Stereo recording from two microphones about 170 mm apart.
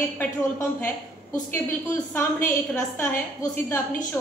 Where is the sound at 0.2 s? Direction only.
10° left (ahead or behind).